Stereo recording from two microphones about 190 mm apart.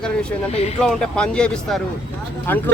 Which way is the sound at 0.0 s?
5° left (ahead or behind).